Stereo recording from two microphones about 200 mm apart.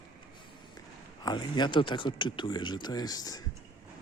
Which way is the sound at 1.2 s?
20° left (ahead or behind).